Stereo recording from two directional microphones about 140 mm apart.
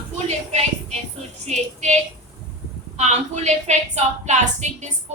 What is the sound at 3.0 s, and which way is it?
Speech, 55° right (ahead or behind).